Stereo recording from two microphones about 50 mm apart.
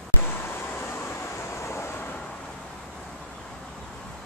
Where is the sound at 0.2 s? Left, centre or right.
Left.